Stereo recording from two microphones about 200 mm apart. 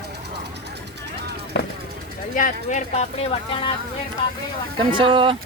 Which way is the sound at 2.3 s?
40° left (ahead or behind).